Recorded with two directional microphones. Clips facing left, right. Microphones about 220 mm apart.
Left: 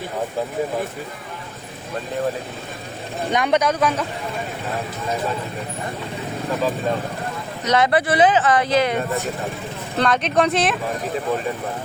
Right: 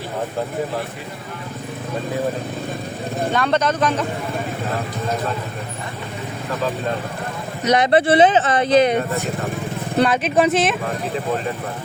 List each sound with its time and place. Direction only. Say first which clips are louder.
3.3 s speech: left 2 dB; 15° left (ahead or behind)
7.7 s speech: right 3 dB; 20° right (ahead or behind)
10.0 s speech: right 2 dB; 5° right (ahead or behind)